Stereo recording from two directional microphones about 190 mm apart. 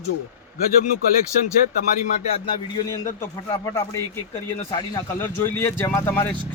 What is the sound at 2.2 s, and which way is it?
A man's voice, 30° left (ahead or behind).